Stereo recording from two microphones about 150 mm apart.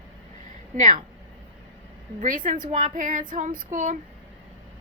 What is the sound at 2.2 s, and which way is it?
A woman's voice, 60° right (ahead or behind).